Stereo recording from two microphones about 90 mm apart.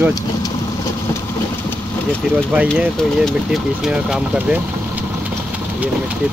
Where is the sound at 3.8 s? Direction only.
5° right (ahead or behind).